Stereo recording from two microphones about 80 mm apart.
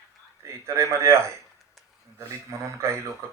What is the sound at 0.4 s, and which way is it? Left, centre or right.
Speech, right.